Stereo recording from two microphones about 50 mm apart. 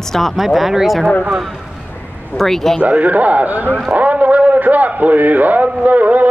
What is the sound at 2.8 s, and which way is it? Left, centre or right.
A man's voice, right.